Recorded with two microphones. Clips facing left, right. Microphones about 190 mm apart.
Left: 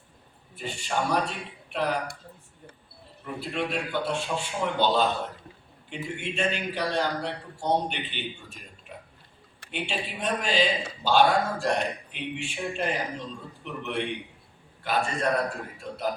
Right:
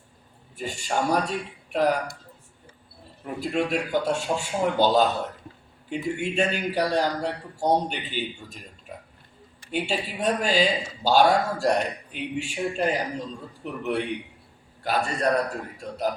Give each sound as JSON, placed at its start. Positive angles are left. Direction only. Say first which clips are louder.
{"t": 0.5, "sound": "speech", "louder": "right 3 dB", "side_deg": -40}
{"t": 3.4, "sound": "a man's voice", "louder": "right 5 dB", "side_deg": -45}
{"t": 9.7, "sound": "a man's voice", "louder": "right 5 dB", "side_deg": -40}
{"t": 14.8, "sound": "a man's voice", "louder": "right 2 dB", "side_deg": -40}